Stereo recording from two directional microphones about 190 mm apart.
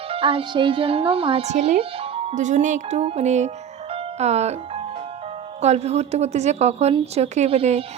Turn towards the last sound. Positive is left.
turn(degrees=-30)  # may be behind; listen again after turning